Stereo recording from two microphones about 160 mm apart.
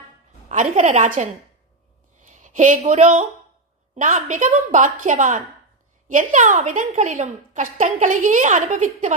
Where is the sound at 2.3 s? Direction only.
50° right (ahead or behind).